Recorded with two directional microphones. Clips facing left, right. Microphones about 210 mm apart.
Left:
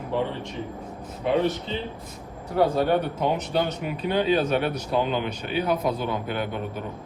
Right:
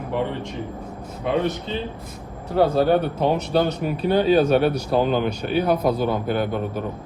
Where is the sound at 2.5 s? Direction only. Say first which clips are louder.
Right 4 dB; 30° right (ahead or behind).